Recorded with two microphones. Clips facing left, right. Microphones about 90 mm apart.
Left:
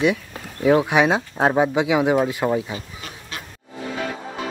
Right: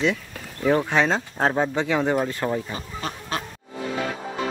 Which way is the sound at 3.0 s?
40° right (ahead or behind).